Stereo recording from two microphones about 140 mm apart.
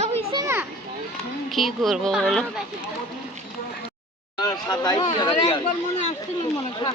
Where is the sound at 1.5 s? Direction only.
Centre (ahead or behind).